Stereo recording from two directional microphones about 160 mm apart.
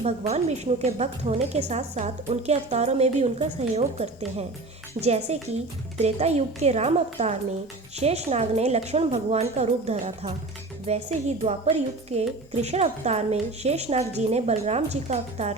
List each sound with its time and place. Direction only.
0.0 s a woman's voice: 40° right (ahead or behind)